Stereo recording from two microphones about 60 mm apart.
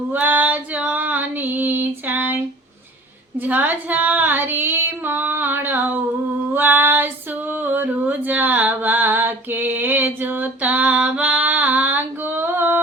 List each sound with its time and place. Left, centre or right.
0.1 s female singing: right